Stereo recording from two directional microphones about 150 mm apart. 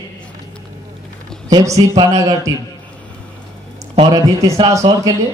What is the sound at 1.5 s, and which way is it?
Speech, 25° right (ahead or behind).